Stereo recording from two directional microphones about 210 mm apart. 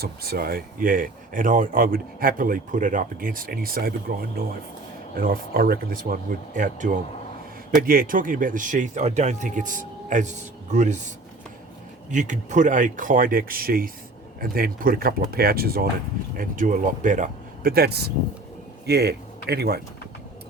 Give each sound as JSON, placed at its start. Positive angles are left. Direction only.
{"t": 0.0, "sound": "speech", "side_deg": -45}
{"t": 12.1, "sound": "speech", "side_deg": -35}